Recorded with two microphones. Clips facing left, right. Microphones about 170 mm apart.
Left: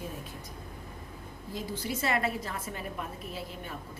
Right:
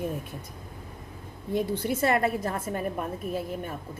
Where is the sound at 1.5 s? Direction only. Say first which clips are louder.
Right 8 dB; 60° right (ahead or behind).